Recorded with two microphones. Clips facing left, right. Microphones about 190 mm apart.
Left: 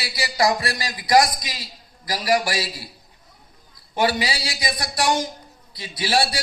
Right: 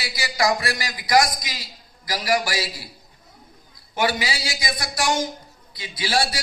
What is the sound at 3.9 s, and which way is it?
A man's voice, 30° left (ahead or behind).